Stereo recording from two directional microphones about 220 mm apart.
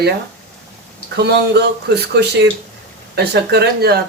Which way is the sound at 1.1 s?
50° right (ahead or behind).